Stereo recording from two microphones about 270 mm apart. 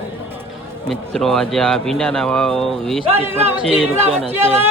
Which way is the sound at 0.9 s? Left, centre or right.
Centre.